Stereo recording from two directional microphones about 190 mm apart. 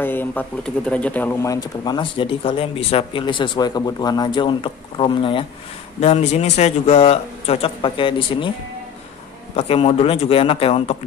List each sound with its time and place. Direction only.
0.0 s speech: 10° left (ahead or behind); by 8.5 s 25° left (ahead or behind)
9.6 s speech: 30° left (ahead or behind)